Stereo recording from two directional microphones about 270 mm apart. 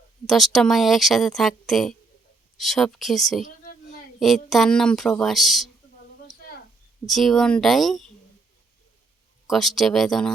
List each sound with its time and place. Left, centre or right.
0.3 s speech: centre
3.4 s a sound: left
4.2 s speech: centre
7.1 s speech: centre
9.5 s speech: centre